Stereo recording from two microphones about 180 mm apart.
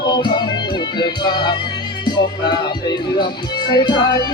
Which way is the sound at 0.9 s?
25° left (ahead or behind).